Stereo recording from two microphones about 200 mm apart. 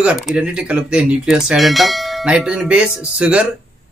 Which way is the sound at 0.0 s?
5° right (ahead or behind).